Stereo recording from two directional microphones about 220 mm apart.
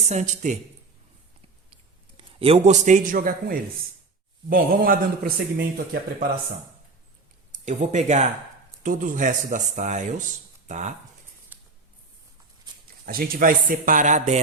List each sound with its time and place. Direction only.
0.0 s speech: 30° right (ahead or behind)
1.7 s a man's voice: 25° right (ahead or behind); by 6.2 s 40° right (ahead or behind)
7.6 s speech: 35° right (ahead or behind)
11.5 s a sound: 10° right (ahead or behind)
13.1 s speech: 40° right (ahead or behind)